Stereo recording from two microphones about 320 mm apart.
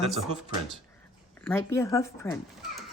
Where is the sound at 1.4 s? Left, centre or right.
Centre.